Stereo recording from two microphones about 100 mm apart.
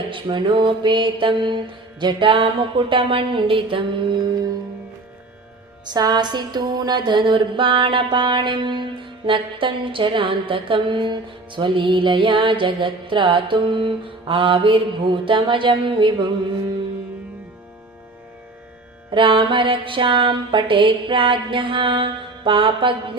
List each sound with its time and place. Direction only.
0.1 s music: 50° right (ahead or behind)
5.8 s music: 45° right (ahead or behind)
19.1 s music: 60° right (ahead or behind)